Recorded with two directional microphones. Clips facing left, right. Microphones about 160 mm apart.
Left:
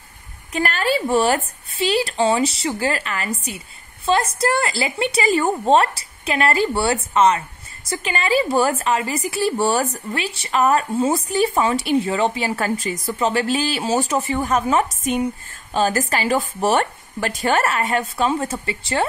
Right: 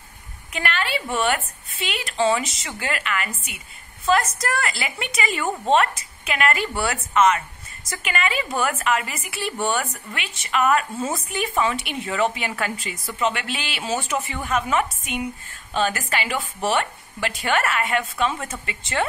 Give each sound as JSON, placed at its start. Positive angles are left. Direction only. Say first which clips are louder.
{"t": 0.5, "sound": "a woman's voice", "louder": "left 5 dB", "side_deg": 40}